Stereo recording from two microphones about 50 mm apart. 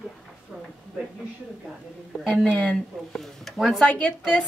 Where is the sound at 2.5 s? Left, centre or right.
Left.